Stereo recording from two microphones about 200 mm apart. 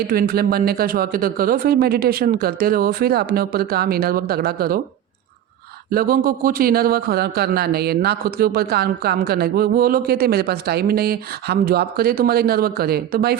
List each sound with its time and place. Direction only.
0.1 s a man's voice: 50° right (ahead or behind)
5.9 s a man's voice: 45° right (ahead or behind)